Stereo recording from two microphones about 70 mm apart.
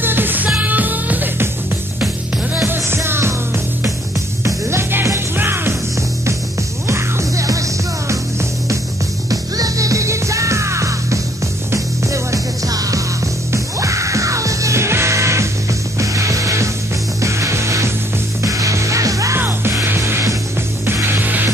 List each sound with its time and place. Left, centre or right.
0.0 s music: right
2.6 s music: right
4.6 s music: right
6.9 s music: right
9.3 s music: right
13.5 s music: right
19.3 s music: right